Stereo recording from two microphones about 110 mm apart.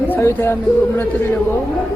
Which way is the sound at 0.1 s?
25° left (ahead or behind).